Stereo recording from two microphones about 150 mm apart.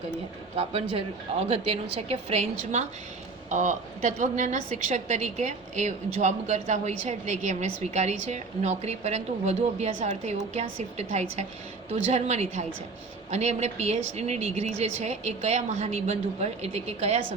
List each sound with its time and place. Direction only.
0.5 s a woman's voice: 40° right (ahead or behind)